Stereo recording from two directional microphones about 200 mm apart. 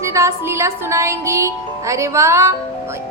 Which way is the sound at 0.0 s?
15° right (ahead or behind).